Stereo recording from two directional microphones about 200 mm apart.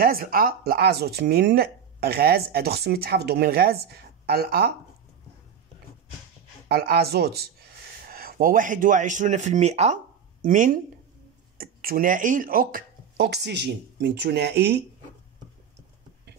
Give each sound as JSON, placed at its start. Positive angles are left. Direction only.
{"t": 0.0, "sound": "speech", "side_deg": -45}
{"t": 6.7, "sound": "speech", "side_deg": -50}